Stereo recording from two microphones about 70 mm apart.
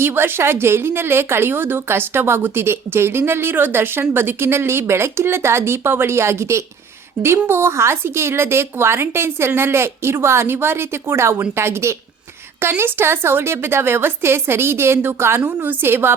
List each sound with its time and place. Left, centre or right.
0.0 s a woman's voice: right